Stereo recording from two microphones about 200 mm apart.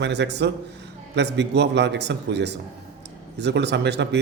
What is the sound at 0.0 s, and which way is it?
A man's voice, 60° right (ahead or behind).